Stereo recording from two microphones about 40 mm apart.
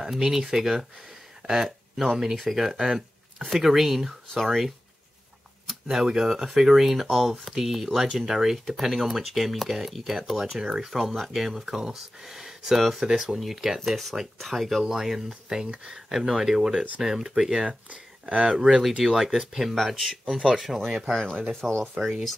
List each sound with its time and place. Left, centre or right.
0.0 s speech: centre
17.6 s speech: right
18.6 s speech: centre
21.5 s speech: centre